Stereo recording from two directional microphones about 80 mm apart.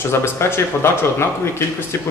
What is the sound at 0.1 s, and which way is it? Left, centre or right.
Speech, left.